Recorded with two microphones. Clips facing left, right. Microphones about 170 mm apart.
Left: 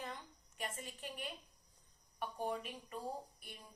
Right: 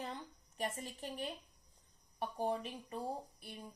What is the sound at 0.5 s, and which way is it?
A woman's voice, 35° right (ahead or behind).